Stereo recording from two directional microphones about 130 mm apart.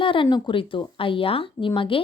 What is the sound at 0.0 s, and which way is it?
A woman's voice, 40° left (ahead or behind).